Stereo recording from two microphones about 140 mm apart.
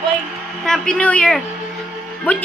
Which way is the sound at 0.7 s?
5° left (ahead or behind).